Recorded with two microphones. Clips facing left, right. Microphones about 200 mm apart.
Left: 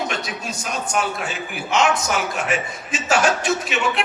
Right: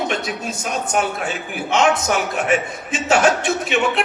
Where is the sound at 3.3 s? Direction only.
55° right (ahead or behind).